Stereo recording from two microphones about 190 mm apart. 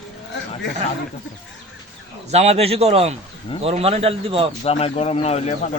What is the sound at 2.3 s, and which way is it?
A man's voice, 35° right (ahead or behind).